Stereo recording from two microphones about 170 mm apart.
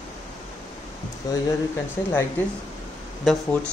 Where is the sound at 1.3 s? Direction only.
20° left (ahead or behind).